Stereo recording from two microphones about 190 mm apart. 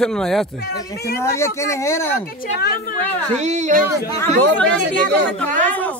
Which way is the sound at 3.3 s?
35° right (ahead or behind).